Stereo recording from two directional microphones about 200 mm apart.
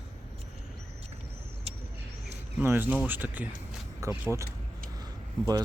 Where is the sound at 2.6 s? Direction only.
10° right (ahead or behind).